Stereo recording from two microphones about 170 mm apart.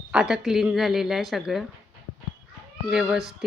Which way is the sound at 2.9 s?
5° right (ahead or behind).